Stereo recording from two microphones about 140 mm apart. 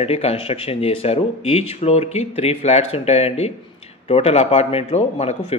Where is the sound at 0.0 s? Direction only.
45° left (ahead or behind).